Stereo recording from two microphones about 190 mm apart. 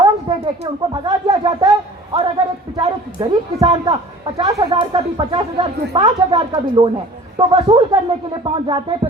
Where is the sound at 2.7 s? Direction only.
20° right (ahead or behind).